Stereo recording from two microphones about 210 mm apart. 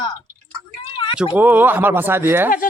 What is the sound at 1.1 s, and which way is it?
Speech, 5° right (ahead or behind).